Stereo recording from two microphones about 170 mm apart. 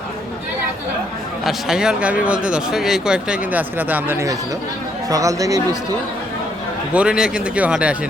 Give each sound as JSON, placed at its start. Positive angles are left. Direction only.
{"t": 1.5, "sound": "speech", "side_deg": -5}
{"t": 6.9, "sound": "speech", "side_deg": -5}